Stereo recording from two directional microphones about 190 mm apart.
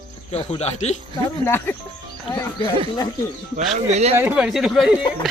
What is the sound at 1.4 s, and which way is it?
Speech, 10° left (ahead or behind).